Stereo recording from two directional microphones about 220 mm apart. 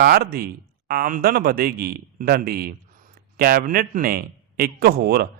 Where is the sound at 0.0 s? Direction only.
45° right (ahead or behind).